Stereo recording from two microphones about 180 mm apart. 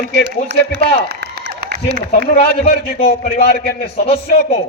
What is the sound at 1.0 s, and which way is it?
Applause, 60° right (ahead or behind).